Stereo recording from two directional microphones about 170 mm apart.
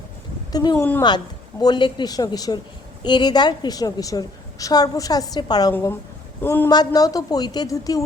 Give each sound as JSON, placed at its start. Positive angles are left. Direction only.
{"t": 0.5, "sound": "a woman's voice", "side_deg": 25}
{"t": 5.7, "sound": "a man's voice", "side_deg": 15}
{"t": 6.7, "sound": "a woman's voice", "side_deg": 25}